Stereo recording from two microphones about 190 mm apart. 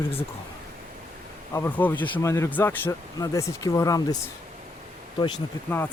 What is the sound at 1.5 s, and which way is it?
Speech, 10° left (ahead or behind).